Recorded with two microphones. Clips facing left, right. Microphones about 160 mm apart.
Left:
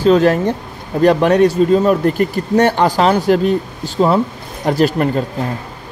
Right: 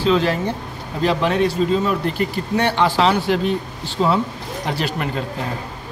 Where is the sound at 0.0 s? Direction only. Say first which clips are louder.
Left 7 dB; 45° left (ahead or behind).